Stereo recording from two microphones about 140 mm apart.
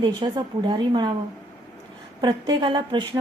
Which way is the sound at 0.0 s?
35° right (ahead or behind).